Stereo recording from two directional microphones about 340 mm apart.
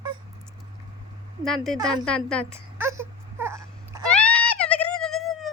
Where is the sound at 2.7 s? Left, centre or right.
Centre.